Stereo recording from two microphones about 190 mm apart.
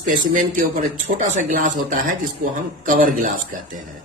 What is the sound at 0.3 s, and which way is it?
Speech, 40° right (ahead or behind).